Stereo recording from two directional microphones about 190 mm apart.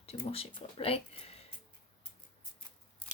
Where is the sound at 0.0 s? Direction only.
30° left (ahead or behind).